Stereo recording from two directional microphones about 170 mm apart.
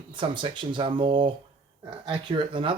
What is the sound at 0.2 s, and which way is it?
Speech, 30° right (ahead or behind).